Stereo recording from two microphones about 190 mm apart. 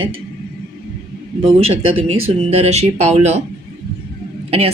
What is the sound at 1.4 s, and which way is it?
Speech, 30° right (ahead or behind).